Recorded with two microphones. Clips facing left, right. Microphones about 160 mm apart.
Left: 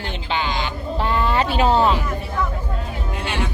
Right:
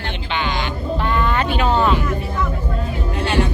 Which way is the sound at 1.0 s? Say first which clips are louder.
Left 1 dB; 30° left (ahead or behind).